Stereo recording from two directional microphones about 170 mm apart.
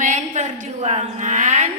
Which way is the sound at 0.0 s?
45° right (ahead or behind).